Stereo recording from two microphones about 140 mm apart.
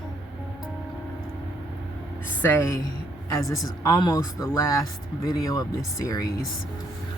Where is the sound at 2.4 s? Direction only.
20° left (ahead or behind).